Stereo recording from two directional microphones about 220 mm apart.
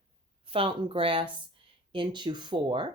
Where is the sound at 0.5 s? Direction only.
25° right (ahead or behind).